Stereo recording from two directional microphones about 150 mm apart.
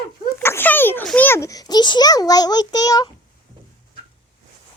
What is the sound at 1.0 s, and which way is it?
A child's voice, 10° left (ahead or behind).